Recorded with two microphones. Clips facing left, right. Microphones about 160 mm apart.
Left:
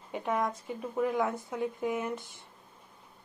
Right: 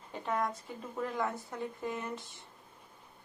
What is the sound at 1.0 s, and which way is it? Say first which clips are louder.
Speech: left 6 dB; 20° left (ahead or behind).